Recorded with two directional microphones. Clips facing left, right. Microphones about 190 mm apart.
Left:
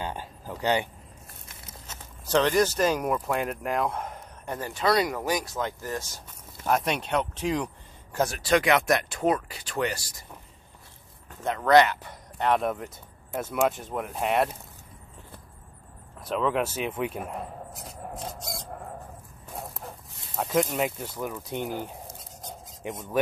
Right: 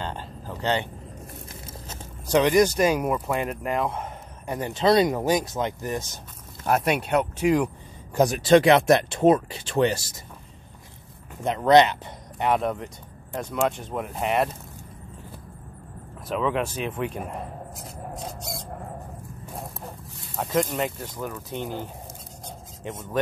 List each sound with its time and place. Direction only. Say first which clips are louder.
0.0 s a sound: right 1 dB; 10° left (ahead or behind)
1.5 s a sound: right 6 dB; 30° right (ahead or behind)
2.2 s speech: right 4 dB; 10° right (ahead or behind)
4.6 s speech: right 5 dB; 20° right (ahead or behind)
6.7 s speech: right 3 dB; 10° right (ahead or behind); by 10.2 s 25° right (ahead or behind)
11.4 s speech: right 2 dB; 20° right (ahead or behind)
12.4 s speech: right 1 dB; centre (ahead or behind)
16.3 s a sound: right 1 dB; centre (ahead or behind)
20.3 s speech: right 1 dB; centre (ahead or behind)
21.2 s speech: even; 15° left (ahead or behind)
22.8 s speech: even; 15° left (ahead or behind)